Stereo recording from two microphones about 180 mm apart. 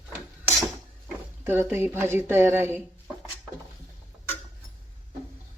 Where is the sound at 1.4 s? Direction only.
10° right (ahead or behind).